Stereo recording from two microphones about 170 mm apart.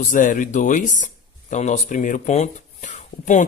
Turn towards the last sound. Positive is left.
turn(degrees=45)  # may be behind; listen again after turning